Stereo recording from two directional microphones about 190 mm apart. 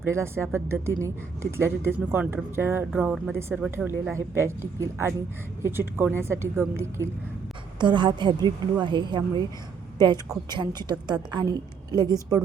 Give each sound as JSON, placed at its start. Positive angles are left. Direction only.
{"t": 0.0, "sound": "speech", "side_deg": -15}
{"t": 4.1, "sound": "speech", "side_deg": -15}
{"t": 7.8, "sound": "a woman's voice", "side_deg": -25}